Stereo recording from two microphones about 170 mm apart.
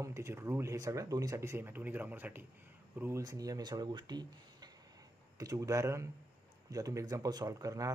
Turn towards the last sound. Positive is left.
turn(degrees=-20)  # may be behind; listen again after turning